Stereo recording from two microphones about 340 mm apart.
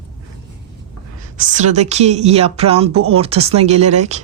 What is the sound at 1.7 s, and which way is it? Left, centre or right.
Speech, centre.